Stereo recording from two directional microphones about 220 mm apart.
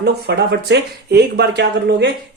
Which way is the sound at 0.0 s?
50° right (ahead or behind).